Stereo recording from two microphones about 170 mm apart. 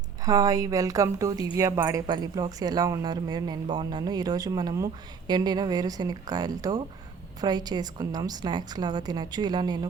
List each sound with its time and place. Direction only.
0.3 s speech: 20° right (ahead or behind)